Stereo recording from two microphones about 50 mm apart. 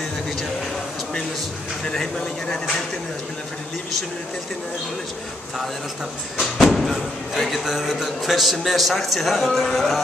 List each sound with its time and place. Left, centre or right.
1.9 s speech: centre
6.4 s speech: centre